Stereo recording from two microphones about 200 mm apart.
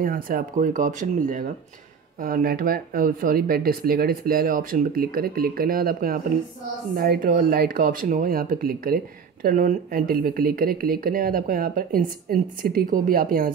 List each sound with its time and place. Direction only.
0.0 s speech: 45° right (ahead or behind)